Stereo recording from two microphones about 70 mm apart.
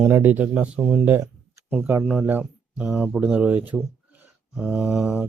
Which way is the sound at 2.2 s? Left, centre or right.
Right.